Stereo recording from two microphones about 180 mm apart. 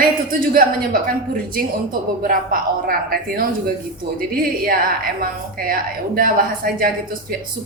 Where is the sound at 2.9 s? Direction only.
55° right (ahead or behind).